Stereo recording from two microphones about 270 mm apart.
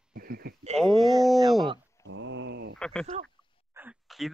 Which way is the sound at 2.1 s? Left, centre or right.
Right.